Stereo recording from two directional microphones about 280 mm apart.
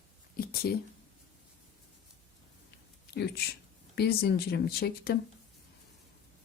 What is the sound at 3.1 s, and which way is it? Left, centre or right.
Speech, left.